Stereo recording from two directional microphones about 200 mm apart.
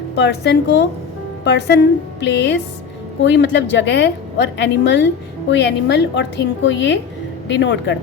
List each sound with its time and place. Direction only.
0.2 s a woman's voice: 60° left (ahead or behind)